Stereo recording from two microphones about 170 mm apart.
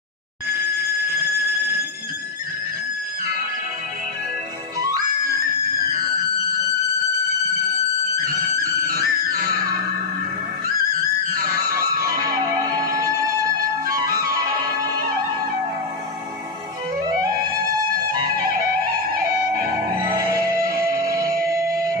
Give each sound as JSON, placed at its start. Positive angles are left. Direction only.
{"t": 4.7, "sound": "music", "side_deg": -20}
{"t": 9.0, "sound": "music", "side_deg": -60}
{"t": 11.4, "sound": "music", "side_deg": -20}
{"t": 19.1, "sound": "music", "side_deg": -55}
{"t": 20.2, "sound": "music", "side_deg": -20}